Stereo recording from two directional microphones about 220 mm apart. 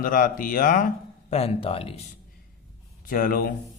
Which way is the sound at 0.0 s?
40° left (ahead or behind).